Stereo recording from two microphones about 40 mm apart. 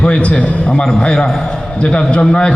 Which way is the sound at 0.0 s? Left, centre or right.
Left.